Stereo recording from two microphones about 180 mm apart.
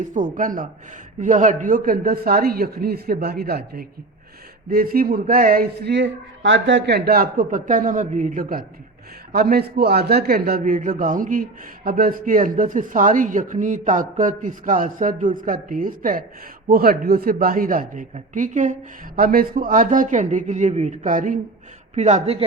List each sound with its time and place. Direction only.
0.0 s a man's voice: 45° right (ahead or behind)